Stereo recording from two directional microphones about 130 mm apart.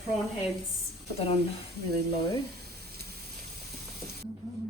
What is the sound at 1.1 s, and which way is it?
Speech, 50° left (ahead or behind).